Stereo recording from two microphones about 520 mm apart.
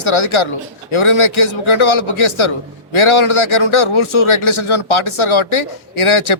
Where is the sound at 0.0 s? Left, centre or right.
Left.